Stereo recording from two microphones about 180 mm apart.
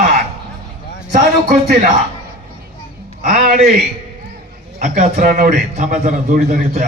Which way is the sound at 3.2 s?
50° right (ahead or behind).